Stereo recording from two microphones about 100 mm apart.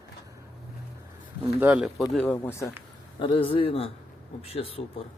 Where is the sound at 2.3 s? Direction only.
30° left (ahead or behind).